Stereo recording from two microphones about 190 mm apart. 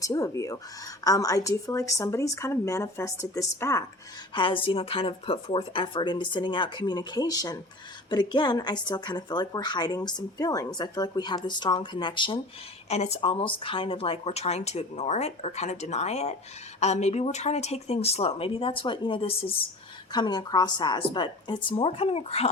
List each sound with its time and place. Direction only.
0.0 s speech: 15° left (ahead or behind)